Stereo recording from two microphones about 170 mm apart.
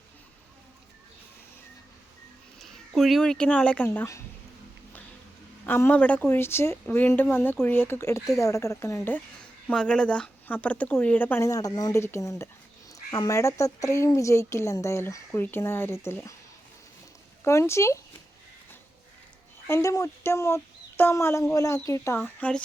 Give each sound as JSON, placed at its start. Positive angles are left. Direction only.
{"t": 2.6, "sound": "speech", "side_deg": 0}
{"t": 5.6, "sound": "speech", "side_deg": 10}
{"t": 17.4, "sound": "speech", "side_deg": 15}
{"t": 19.6, "sound": "speech", "side_deg": 15}